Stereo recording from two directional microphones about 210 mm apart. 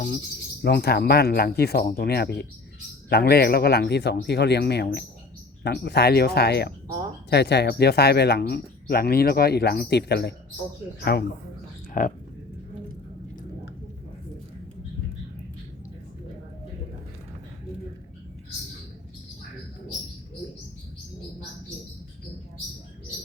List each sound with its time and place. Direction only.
0.6 s speech: 50° left (ahead or behind)